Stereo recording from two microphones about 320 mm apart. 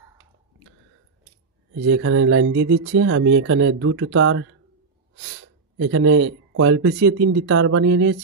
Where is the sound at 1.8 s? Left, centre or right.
Right.